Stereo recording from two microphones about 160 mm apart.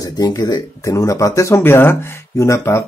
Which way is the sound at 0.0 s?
25° left (ahead or behind).